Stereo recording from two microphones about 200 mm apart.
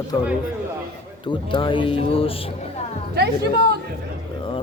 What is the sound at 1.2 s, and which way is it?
Speech, 25° left (ahead or behind).